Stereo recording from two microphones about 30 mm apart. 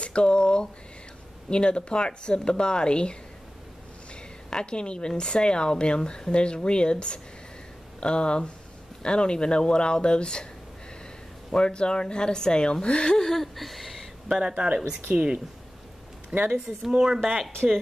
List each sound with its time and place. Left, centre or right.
0.0 s a sound: left
1.5 s a woman's voice: left
11.5 s speech: left
13.3 s a sound: centre
14.4 s speech: right
16.9 s speech: centre